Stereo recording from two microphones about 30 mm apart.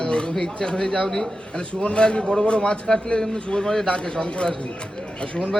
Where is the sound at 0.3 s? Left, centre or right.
Centre.